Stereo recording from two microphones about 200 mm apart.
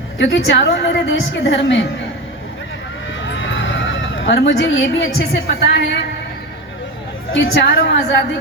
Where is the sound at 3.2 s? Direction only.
70° left (ahead or behind).